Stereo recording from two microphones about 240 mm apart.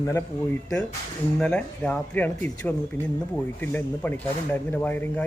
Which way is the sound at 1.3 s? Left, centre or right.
Centre.